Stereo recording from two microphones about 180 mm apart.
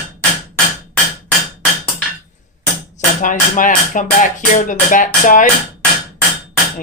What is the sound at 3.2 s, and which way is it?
Music, 45° left (ahead or behind).